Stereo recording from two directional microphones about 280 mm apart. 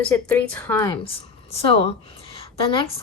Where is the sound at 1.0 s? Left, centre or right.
Left.